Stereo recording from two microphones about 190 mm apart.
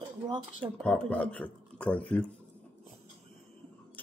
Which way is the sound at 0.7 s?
5° left (ahead or behind).